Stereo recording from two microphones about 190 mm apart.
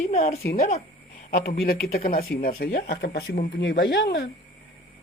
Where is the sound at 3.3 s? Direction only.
45° left (ahead or behind).